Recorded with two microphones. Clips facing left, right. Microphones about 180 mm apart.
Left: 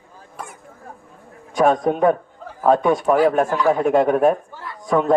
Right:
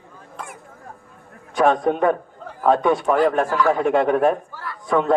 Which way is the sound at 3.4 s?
20° left (ahead or behind).